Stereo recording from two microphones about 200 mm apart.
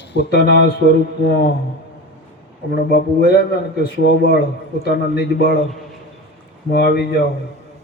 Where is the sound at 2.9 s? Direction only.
55° left (ahead or behind).